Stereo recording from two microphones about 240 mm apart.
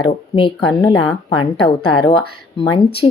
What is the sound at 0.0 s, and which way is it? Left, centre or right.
Speech, left.